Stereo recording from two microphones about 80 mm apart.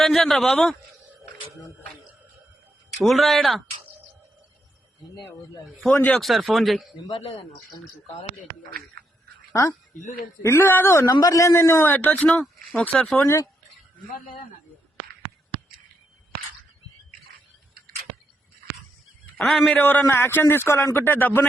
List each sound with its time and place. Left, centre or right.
0.0 s a man's voice: centre
3.0 s a man's voice: centre
6.1 s a man's voice: centre
9.5 s a man's voice: left
11.9 s speech: left
13.1 s a man's voice: left
19.4 s a man's voice: centre
19.6 s a man's voice: left